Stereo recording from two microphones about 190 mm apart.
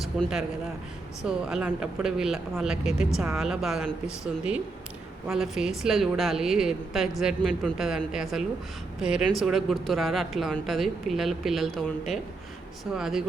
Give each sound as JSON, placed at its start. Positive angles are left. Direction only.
{"t": 0.0, "sound": "speech", "side_deg": 0}
{"t": 5.3, "sound": "speech", "side_deg": 0}